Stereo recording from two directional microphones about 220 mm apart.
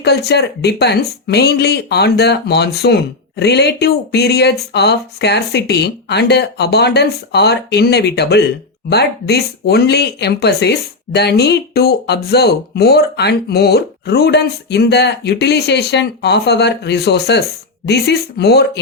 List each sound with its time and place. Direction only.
0.0 s speech: 50° left (ahead or behind)